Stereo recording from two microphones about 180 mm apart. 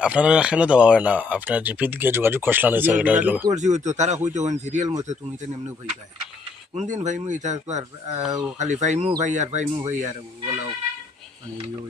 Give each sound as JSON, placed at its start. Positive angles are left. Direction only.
{"t": 0.0, "sound": "speech", "side_deg": -5}
{"t": 3.5, "sound": "speech", "side_deg": -40}
{"t": 6.7, "sound": "speech", "side_deg": -40}